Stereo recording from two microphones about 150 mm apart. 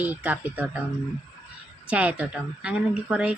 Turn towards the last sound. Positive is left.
turn(degrees=-5)  # may be behind; listen again after turning